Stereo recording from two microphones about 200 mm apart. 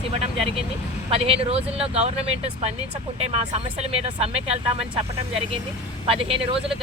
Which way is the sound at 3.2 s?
30° right (ahead or behind).